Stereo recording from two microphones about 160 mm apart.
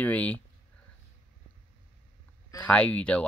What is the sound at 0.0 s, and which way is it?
Speech, 10° left (ahead or behind).